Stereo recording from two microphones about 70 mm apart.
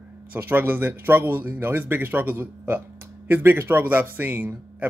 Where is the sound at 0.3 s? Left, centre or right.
Right.